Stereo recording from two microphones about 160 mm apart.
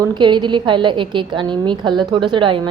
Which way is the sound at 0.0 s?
30° right (ahead or behind).